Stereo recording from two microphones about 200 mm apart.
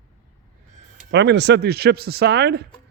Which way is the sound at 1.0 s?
60° right (ahead or behind).